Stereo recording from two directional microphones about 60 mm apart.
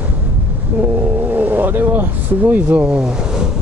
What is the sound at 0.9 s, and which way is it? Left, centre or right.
Speech, right.